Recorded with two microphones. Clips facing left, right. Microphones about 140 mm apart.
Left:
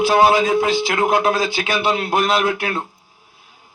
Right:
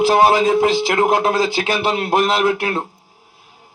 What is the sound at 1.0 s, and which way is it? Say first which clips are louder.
A man's voice: right 1 dB; 40° right (ahead or behind).